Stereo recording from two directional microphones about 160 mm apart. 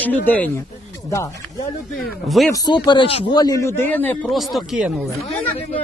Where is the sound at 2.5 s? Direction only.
25° left (ahead or behind).